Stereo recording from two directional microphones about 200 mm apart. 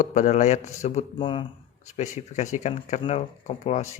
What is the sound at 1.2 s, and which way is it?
Speech, 25° left (ahead or behind).